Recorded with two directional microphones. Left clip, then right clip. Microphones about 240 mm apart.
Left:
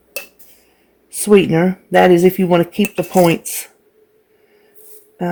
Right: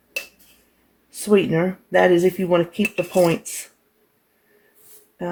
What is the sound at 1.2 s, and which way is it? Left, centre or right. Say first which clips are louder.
Speech: left 6 dB; left.